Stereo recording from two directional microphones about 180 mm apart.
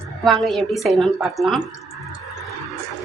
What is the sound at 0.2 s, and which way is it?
A woman's voice, centre (ahead or behind).